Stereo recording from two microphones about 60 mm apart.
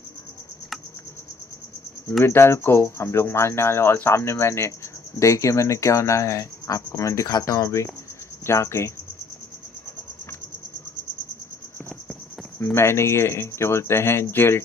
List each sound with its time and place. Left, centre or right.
2.2 s speech: left
5.2 s speech: left
12.7 s speech: left